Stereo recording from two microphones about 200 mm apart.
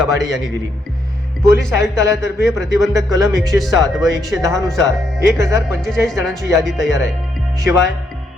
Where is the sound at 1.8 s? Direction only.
15° right (ahead or behind).